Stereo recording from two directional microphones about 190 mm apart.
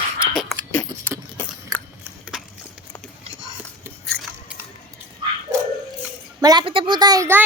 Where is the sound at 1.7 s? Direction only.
20° right (ahead or behind).